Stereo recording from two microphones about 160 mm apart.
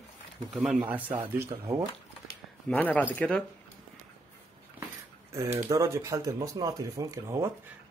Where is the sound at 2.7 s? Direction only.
10° left (ahead or behind).